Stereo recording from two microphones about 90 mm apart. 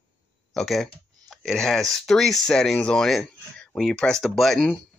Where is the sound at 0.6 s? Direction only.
Centre (ahead or behind).